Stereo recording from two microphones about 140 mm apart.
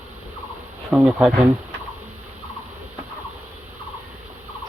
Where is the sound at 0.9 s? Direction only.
5° right (ahead or behind).